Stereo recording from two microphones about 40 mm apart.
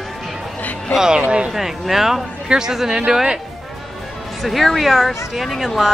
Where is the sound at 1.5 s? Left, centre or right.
Centre.